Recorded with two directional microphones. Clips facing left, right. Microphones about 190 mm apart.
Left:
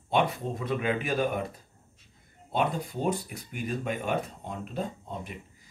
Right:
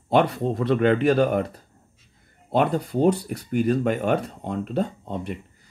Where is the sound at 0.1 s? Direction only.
70° right (ahead or behind).